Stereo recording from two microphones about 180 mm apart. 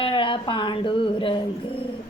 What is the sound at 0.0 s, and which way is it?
A woman's voice, 30° left (ahead or behind).